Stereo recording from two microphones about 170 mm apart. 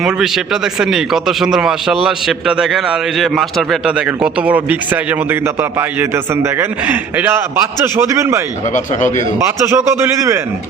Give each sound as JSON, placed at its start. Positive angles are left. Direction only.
{"t": 0.0, "sound": "a man's voice", "side_deg": -5}
{"t": 8.7, "sound": "speech", "side_deg": 45}
{"t": 9.6, "sound": "a man's voice", "side_deg": -15}